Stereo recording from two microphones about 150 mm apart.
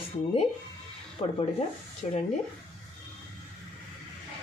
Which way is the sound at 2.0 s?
45° left (ahead or behind).